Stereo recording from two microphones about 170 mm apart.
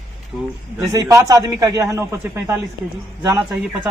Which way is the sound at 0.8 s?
20° right (ahead or behind).